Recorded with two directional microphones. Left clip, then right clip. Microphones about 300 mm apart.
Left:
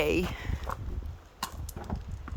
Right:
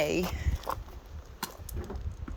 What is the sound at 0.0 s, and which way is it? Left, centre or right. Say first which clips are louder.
Walk: left 1 dB; centre.